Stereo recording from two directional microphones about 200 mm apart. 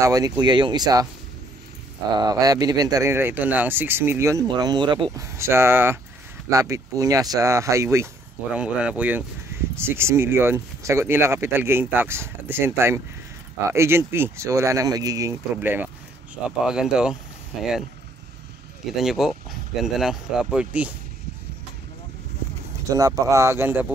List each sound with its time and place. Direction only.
0.0 s speech: 20° right (ahead or behind)
2.1 s speech: 20° right (ahead or behind); by 17.2 s 5° right (ahead or behind)
19.0 s speech: centre (ahead or behind)
22.9 s speech: 15° right (ahead or behind)